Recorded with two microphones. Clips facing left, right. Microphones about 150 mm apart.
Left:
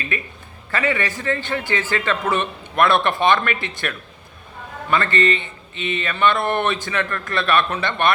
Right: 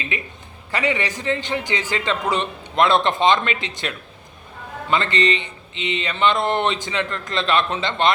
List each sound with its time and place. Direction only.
0.1 s a man's voice: 15° right (ahead or behind)